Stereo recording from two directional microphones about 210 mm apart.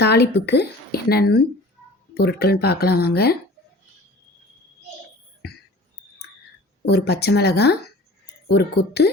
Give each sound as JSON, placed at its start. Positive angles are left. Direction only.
{"t": 0.0, "sound": "a woman's voice", "side_deg": 50}
{"t": 6.8, "sound": "a woman's voice", "side_deg": 50}